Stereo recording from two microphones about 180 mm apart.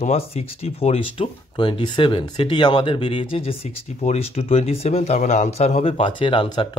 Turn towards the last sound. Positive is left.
turn(degrees=30)  # may be behind; listen again after turning